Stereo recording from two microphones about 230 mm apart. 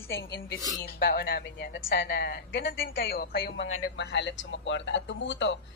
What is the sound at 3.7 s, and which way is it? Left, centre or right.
Speech, left.